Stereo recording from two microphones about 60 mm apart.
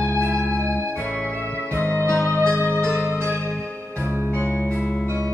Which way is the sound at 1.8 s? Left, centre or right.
Left.